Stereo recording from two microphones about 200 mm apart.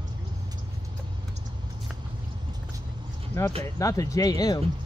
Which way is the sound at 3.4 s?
15° left (ahead or behind).